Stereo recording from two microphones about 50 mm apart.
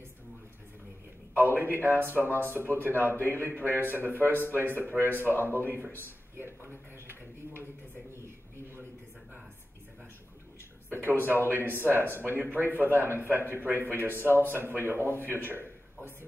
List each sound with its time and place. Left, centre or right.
1.4 s a man's voice: right
3.1 s a man's voice: left
3.3 s a man's voice: right
6.3 s a sound: right
10.9 s a man's voice: right
13.5 s a man's voice: right
15.1 s a sound: right